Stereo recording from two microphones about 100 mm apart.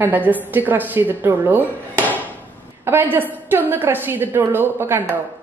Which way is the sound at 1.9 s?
15° left (ahead or behind).